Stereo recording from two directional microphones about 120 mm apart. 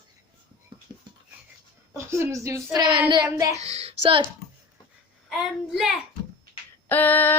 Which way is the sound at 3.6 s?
60° right (ahead or behind).